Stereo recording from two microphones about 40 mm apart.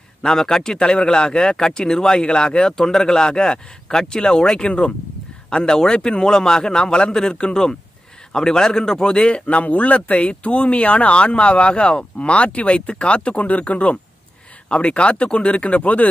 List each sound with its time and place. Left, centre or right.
0.2 s a man's voice: centre
9.2 s speech: left